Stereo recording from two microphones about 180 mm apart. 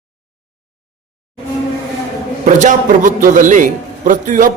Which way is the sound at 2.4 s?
45° right (ahead or behind).